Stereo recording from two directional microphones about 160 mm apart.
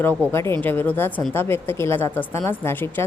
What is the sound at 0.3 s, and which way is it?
A woman's voice, 15° left (ahead or behind).